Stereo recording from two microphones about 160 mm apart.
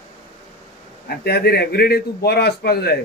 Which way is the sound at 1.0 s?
85° left.